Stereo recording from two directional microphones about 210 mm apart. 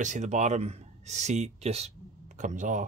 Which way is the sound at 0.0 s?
35° right (ahead or behind).